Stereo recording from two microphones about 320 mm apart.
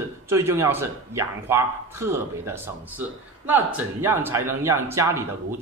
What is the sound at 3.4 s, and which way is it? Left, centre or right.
A man's voice, centre.